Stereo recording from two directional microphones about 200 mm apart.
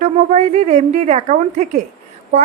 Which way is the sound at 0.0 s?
35° right (ahead or behind).